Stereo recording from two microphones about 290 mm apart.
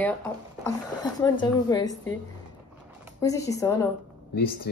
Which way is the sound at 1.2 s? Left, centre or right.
Centre.